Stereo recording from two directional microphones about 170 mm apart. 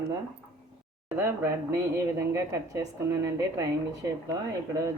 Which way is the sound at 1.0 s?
15° right (ahead or behind).